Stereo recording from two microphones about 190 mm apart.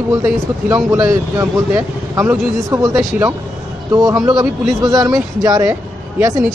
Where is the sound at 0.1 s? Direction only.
10° right (ahead or behind).